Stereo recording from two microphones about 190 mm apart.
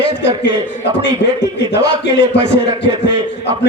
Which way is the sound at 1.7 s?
65° left (ahead or behind).